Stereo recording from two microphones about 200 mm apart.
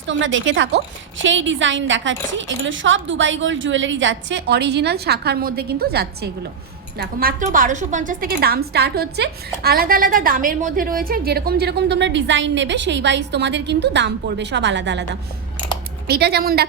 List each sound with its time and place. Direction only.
0.1 s a woman's voice: 70° right (ahead or behind); by 16.6 s 50° right (ahead or behind)